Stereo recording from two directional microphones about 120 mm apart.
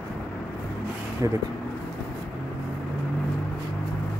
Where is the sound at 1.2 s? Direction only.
30° right (ahead or behind).